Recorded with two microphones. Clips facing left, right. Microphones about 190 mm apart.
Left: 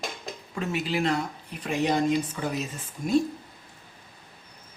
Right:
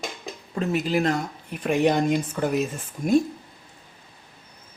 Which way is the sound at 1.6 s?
55° right (ahead or behind).